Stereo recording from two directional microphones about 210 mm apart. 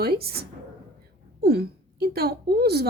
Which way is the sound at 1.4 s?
50° right (ahead or behind).